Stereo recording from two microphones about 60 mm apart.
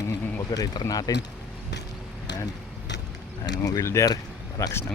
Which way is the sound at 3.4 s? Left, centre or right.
Left.